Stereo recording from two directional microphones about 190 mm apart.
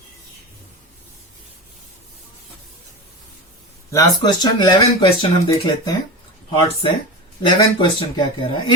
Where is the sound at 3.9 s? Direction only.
20° left (ahead or behind).